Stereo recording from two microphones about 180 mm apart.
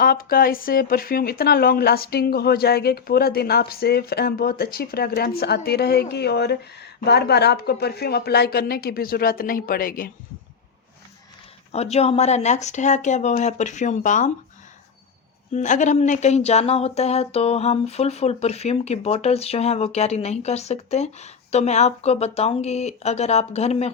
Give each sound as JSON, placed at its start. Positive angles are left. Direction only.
{"t": 0.0, "sound": "speech", "side_deg": 55}
{"t": 11.7, "sound": "speech", "side_deg": 35}
{"t": 15.5, "sound": "speech", "side_deg": 40}